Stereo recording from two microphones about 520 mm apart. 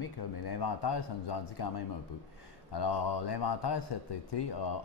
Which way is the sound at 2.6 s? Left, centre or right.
Left.